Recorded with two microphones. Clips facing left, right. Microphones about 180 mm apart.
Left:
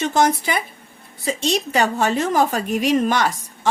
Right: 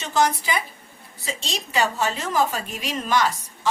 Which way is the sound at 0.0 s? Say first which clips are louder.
Left 4 dB; 55° left (ahead or behind).